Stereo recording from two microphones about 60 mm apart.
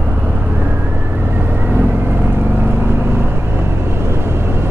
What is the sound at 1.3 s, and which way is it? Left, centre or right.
Vehicle, right.